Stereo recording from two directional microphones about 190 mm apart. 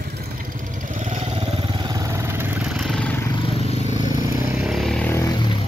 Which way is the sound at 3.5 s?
35° left (ahead or behind).